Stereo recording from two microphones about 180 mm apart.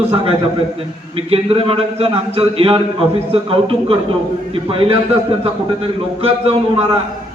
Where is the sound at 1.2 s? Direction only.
30° right (ahead or behind).